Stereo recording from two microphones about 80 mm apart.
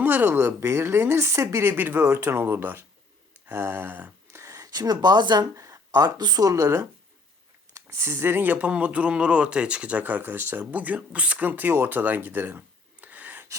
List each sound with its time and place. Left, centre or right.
0.0 s speech: right
1.2 s speech: right
4.3 s a sound: right
5.5 s speech: right